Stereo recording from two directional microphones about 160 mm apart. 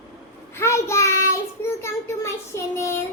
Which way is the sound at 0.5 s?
15° left (ahead or behind).